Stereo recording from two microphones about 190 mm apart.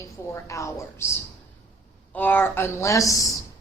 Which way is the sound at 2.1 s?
10° left (ahead or behind).